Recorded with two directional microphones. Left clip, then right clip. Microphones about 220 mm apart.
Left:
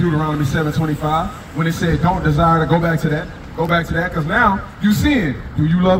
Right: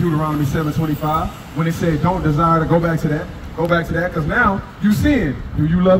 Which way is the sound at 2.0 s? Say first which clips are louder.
Left 2 dB; 35° left (ahead or behind).